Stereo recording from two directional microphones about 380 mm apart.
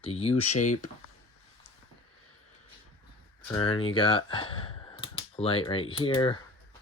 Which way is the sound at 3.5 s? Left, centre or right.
Centre.